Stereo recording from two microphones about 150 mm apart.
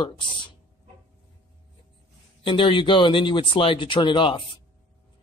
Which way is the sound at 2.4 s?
35° left (ahead or behind).